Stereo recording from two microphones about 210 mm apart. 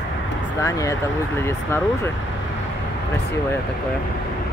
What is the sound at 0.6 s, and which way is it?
Speech, 15° left (ahead or behind).